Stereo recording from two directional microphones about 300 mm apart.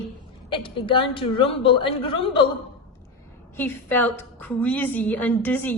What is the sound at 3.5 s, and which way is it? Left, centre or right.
A woman's voice, centre.